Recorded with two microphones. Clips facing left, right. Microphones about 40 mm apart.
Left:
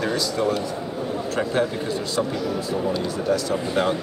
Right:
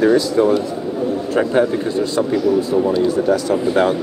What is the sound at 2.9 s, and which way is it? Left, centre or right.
Speech, centre.